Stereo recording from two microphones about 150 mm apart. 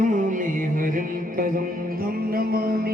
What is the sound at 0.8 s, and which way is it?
Music, 65° right (ahead or behind).